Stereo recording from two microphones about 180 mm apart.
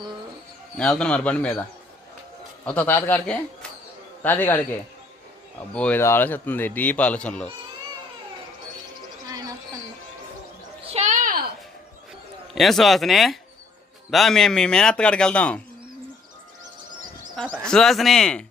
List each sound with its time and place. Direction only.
0.8 s speech: 5° left (ahead or behind)
2.6 s speech: 10° left (ahead or behind)
5.7 s speech: 10° left (ahead or behind)
9.3 s a sound: 20° right (ahead or behind)
10.8 s a sound: 40° right (ahead or behind)
12.5 s a man's voice: centre (ahead or behind)
17.7 s a man's voice: centre (ahead or behind)